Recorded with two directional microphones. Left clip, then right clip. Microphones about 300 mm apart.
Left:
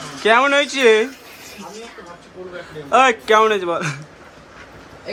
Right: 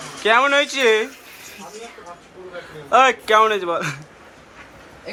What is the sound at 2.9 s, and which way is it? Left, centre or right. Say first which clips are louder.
A man's voice: left 1 dB; centre.